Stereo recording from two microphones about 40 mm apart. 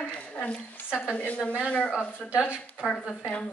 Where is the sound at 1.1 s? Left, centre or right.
Left.